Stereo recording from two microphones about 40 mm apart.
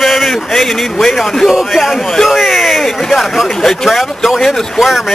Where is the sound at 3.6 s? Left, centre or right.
Centre.